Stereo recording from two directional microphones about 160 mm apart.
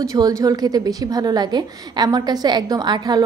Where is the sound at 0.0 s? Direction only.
20° right (ahead or behind).